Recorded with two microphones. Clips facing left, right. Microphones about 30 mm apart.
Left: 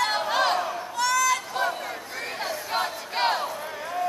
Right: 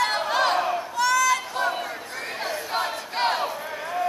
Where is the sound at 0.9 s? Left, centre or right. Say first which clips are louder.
Right 2 dB; centre.